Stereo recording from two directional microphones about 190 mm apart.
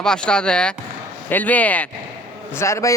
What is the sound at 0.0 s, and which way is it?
A man's voice, 5° left (ahead or behind).